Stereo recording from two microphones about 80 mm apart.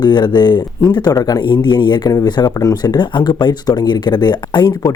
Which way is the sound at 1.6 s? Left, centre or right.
Left.